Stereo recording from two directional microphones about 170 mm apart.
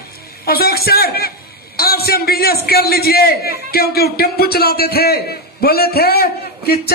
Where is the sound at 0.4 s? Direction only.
65° left (ahead or behind).